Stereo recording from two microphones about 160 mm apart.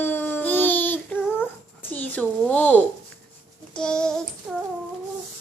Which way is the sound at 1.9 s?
10° left (ahead or behind).